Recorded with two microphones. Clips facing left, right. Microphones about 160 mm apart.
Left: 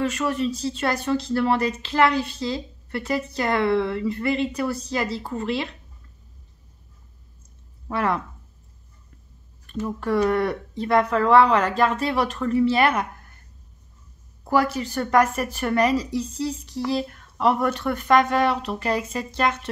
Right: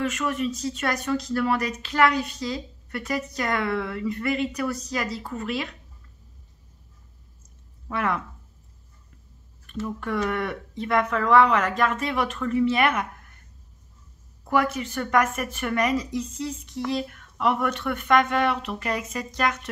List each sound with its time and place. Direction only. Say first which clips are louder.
0.0 s speech: left 2 dB; 35° left (ahead or behind)
7.9 s a woman's voice: left 3 dB; 35° left (ahead or behind)
9.8 s a woman's voice: left 6 dB; 35° left (ahead or behind)
14.4 s a woman's voice: left 2 dB; 35° left (ahead or behind)